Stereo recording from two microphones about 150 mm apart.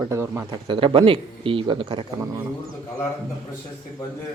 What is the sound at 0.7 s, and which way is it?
Speech, 35° right (ahead or behind).